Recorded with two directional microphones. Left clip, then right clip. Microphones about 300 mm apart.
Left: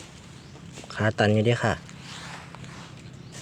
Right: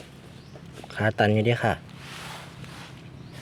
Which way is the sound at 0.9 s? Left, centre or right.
Centre.